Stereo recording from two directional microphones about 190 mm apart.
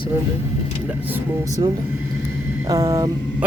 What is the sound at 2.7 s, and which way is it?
Mantra, 15° right (ahead or behind).